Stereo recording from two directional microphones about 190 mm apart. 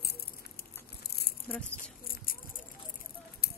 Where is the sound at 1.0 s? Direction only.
55° left (ahead or behind).